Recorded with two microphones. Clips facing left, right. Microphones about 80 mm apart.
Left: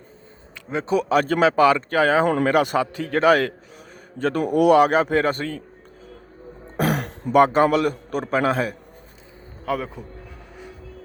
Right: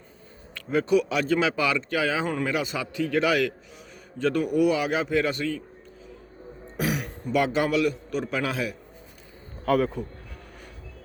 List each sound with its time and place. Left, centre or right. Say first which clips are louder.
0.5 s speech: right 1 dB; left
0.9 s a man's voice: left 5 dB; left
2.2 s speech: left 8 dB; left
2.8 s a man's voice: left 5 dB; left
4.4 s a man's voice: left 11 dB; left
6.7 s throat clearing: left 5 dB; left
7.3 s a man's voice: left 7 dB; left
9.6 s speech: right 3 dB; centre